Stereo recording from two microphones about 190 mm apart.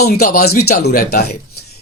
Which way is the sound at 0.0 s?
55° left (ahead or behind).